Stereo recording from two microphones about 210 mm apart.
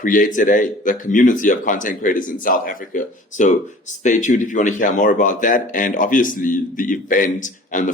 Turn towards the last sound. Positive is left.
turn(degrees=40)  # may be behind; listen again after turning